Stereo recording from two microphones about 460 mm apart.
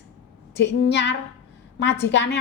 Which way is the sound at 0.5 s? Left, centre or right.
Left.